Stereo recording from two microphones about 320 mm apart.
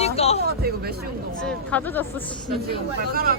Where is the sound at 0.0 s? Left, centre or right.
Centre.